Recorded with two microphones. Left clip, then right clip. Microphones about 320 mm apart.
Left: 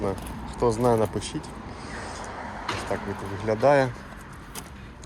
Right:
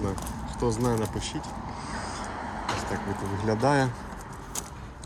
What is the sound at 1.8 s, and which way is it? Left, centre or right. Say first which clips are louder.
Vehicle: even; right.